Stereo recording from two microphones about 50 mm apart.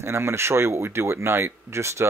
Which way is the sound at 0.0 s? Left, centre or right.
Right.